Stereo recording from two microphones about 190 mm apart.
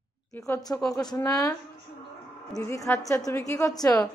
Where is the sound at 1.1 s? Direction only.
20° left (ahead or behind).